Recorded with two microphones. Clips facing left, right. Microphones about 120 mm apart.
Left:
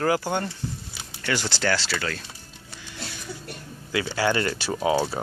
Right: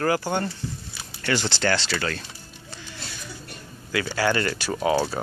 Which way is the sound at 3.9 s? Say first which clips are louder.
Even; 20° left (ahead or behind).